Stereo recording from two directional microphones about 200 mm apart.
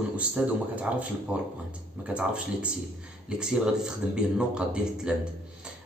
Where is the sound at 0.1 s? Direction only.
5° right (ahead or behind).